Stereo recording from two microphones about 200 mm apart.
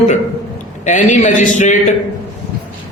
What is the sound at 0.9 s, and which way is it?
Speech, 40° left (ahead or behind).